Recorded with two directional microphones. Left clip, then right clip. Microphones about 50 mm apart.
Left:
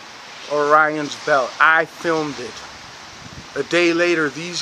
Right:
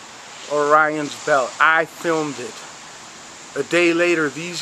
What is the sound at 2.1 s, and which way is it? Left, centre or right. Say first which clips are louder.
Speech: even; left.